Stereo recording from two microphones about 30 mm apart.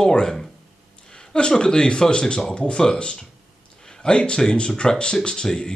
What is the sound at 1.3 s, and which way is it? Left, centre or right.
Speech, left.